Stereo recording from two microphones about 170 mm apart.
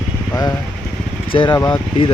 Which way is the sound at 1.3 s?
30° left (ahead or behind).